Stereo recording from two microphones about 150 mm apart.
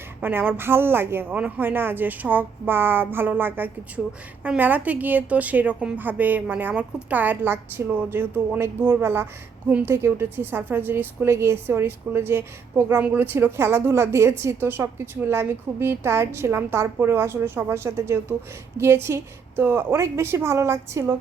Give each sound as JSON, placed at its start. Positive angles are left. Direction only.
{"t": 0.2, "sound": "a woman's voice", "side_deg": -15}